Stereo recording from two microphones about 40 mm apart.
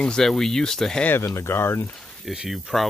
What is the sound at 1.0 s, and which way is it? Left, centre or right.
Speech, left.